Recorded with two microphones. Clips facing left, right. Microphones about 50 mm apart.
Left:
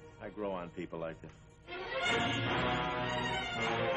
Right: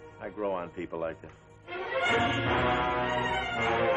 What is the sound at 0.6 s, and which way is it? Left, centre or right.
Speech, right.